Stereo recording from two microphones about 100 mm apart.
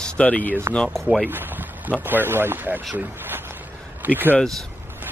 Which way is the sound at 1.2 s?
20° right (ahead or behind).